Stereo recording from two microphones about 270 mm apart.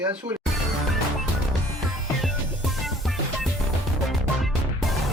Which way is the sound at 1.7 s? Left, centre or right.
Centre.